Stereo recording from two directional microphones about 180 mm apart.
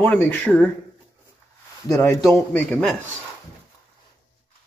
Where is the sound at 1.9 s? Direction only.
15° left (ahead or behind).